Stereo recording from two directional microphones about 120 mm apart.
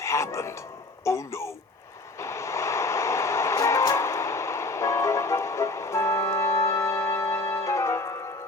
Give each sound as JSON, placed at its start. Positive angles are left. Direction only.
{"t": 0.0, "sound": "speech", "side_deg": 25}
{"t": 2.1, "sound": "music", "side_deg": 25}